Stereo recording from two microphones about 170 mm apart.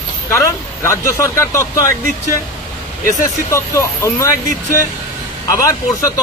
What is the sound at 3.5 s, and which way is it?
Speech, 15° left (ahead or behind).